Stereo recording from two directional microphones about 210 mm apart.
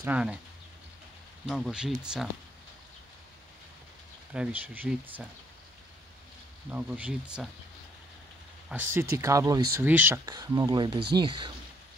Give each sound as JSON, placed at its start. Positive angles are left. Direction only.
{"t": 0.0, "sound": "speech", "side_deg": -5}
{"t": 1.4, "sound": "speech", "side_deg": 0}
{"t": 4.3, "sound": "speech", "side_deg": -5}
{"t": 6.7, "sound": "speech", "side_deg": -5}
{"t": 8.6, "sound": "speech", "side_deg": -10}